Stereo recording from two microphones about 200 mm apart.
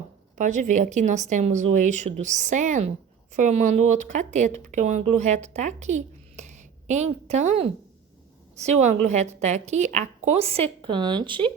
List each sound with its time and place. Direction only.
0.3 s speech: 40° right (ahead or behind)